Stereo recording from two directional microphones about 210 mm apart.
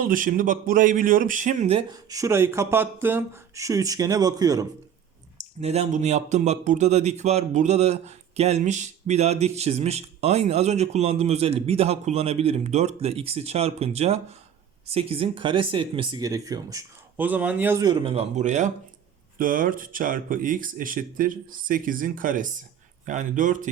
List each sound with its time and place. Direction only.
0.1 s a man's voice: 40° right (ahead or behind); by 4.6 s 15° right (ahead or behind)
5.4 s speech: 30° right (ahead or behind)